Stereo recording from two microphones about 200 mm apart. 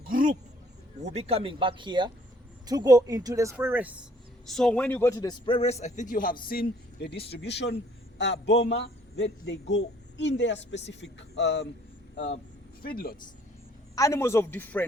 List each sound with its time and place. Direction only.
0.0 s a sound: 45° right (ahead or behind)
1.0 s a woman's voice: 30° right (ahead or behind); by 3.9 s 10° right (ahead or behind)
4.4 s a man's voice: 5° left (ahead or behind); by 11.6 s 60° left (ahead or behind)
12.8 s speech: 50° left (ahead or behind)
13.9 s a man's voice: 15° left (ahead or behind)